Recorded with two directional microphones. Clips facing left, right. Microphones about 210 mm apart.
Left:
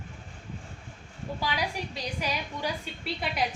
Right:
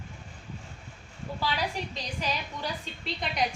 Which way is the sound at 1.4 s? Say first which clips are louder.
Right 1 dB; 10° left (ahead or behind).